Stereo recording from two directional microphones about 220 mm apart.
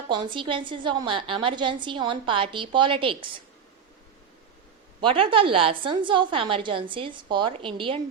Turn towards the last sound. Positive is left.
turn(degrees=-25)  # may be behind; listen again after turning